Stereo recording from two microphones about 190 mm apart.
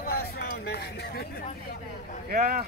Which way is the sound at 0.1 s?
55° left (ahead or behind).